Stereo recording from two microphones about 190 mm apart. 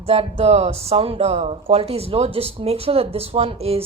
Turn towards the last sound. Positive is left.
turn(degrees=-30)  # may be behind; listen again after turning